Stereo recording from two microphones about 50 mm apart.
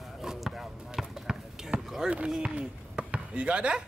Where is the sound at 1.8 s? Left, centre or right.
Centre.